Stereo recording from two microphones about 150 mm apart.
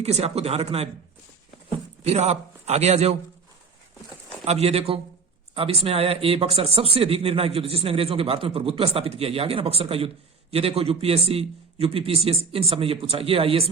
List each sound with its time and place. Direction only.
0.0 s a man's voice: 45° right (ahead or behind)
2.1 s a man's voice: 45° right (ahead or behind)
4.4 s a man's voice: 45° right (ahead or behind)